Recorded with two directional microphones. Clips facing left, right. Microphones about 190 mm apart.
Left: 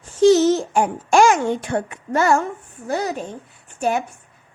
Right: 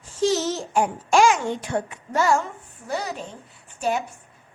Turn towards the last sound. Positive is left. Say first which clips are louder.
# left 3 dB
turn(degrees=55)  # may be behind; listen again after turning